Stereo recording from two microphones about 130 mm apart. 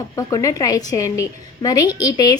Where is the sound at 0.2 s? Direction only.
25° left (ahead or behind).